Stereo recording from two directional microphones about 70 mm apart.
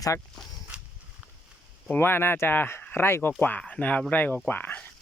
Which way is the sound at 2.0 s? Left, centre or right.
Left.